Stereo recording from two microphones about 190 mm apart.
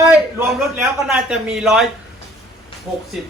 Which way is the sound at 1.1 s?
5° right (ahead or behind).